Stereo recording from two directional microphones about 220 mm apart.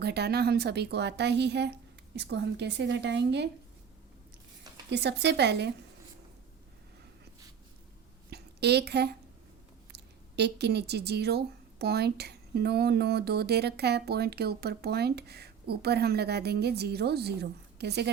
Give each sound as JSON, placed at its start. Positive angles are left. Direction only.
{"t": 0.0, "sound": "speech", "side_deg": -50}
{"t": 4.9, "sound": "speech", "side_deg": -50}
{"t": 8.3, "sound": "a sound", "side_deg": -50}
{"t": 9.9, "sound": "speech", "side_deg": -50}